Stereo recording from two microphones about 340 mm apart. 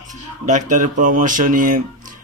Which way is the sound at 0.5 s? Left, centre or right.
Right.